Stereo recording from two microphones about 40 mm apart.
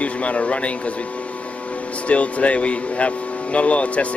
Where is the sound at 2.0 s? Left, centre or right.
Left.